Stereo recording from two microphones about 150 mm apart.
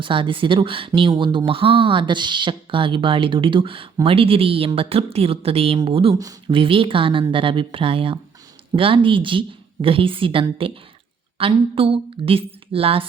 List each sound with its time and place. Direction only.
0.0 s speech: 35° right (ahead or behind)